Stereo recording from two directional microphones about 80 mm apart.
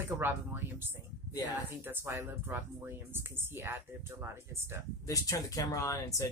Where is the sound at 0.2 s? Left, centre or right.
Right.